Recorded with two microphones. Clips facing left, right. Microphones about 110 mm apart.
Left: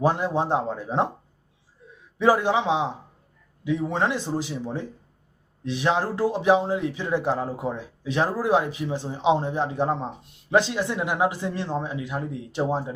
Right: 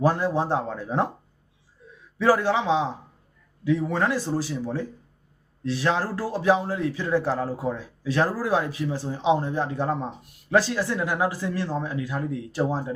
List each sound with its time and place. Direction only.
0.0 s a man's voice: 20° left (ahead or behind)
2.1 s a man's voice: 20° left (ahead or behind)